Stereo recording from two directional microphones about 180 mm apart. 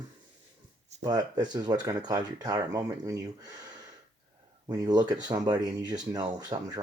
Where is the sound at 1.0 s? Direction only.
20° right (ahead or behind).